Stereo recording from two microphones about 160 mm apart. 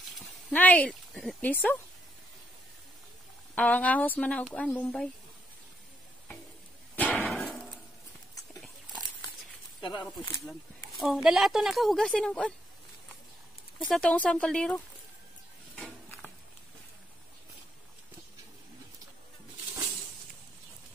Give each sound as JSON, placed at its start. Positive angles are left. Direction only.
{"t": 0.5, "sound": "speech", "side_deg": 10}
{"t": 3.5, "sound": "speech", "side_deg": 10}
{"t": 7.0, "sound": "a sound", "side_deg": 10}
{"t": 9.8, "sound": "a sound", "side_deg": 30}
{"t": 10.1, "sound": "speech", "side_deg": 0}
{"t": 13.8, "sound": "speech", "side_deg": 5}